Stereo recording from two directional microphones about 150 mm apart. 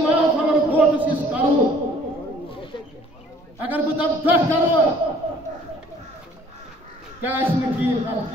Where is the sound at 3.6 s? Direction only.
10° right (ahead or behind).